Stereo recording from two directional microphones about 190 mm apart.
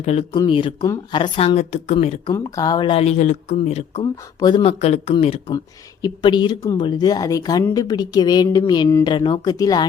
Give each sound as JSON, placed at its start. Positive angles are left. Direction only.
{"t": 0.0, "sound": "speech", "side_deg": 35}
{"t": 2.3, "sound": "speech", "side_deg": 20}
{"t": 4.0, "sound": "speech", "side_deg": 20}
{"t": 4.8, "sound": "speech", "side_deg": 35}